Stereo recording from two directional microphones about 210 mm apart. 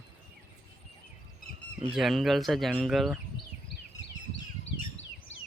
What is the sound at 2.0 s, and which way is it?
Speech, centre (ahead or behind).